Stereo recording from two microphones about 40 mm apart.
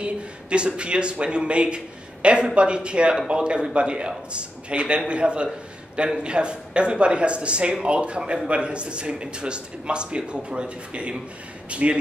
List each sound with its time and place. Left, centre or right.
0.0 s speech: right